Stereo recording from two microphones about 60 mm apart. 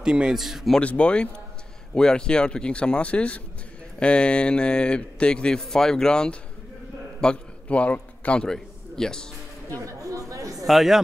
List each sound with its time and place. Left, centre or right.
0.0 s a man's voice: centre
0.7 s a man's voice: centre
7.2 s a sound: centre
8.5 s a man's voice: centre
9.8 s speech: right
10.5 s a man's voice: centre